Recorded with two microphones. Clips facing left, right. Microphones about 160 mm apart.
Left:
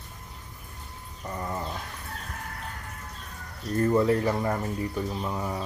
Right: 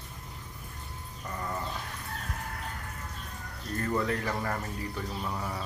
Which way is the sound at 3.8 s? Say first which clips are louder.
Left 8 dB; 25° left (ahead or behind).